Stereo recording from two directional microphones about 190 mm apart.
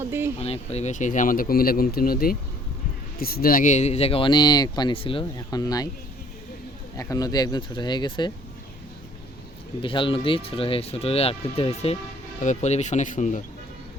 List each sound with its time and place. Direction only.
0.0 s a sound: 10° right (ahead or behind)
0.3 s speech: 30° left (ahead or behind)
6.9 s speech: 20° left (ahead or behind)
9.8 s speech: 25° left (ahead or behind)